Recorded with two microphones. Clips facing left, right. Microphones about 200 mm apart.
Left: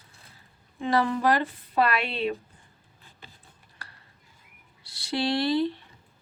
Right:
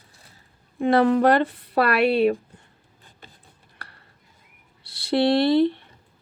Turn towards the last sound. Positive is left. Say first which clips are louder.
# right 7 dB
turn(degrees=-60)  # may be behind; listen again after turning